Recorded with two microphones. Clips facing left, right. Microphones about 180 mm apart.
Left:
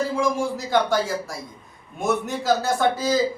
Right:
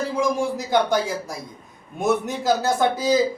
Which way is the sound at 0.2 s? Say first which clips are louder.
Right 1 dB; 20° right (ahead or behind).